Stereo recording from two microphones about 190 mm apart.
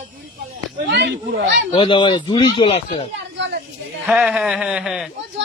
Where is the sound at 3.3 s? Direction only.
65° right (ahead or behind).